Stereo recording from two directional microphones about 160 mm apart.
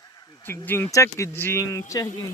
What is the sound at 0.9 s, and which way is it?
Speech, 20° left (ahead or behind).